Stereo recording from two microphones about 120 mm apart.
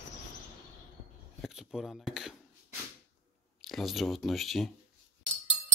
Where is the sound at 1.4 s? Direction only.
Centre (ahead or behind).